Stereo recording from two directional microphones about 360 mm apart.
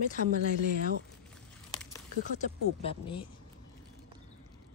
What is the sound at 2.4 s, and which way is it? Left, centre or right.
Speech, centre.